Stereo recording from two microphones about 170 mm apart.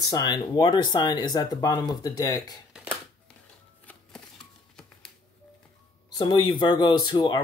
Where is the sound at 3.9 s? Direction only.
10° left (ahead or behind).